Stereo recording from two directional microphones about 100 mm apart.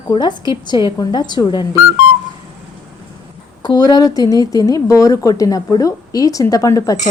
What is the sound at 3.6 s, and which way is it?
A woman's voice, 40° left (ahead or behind).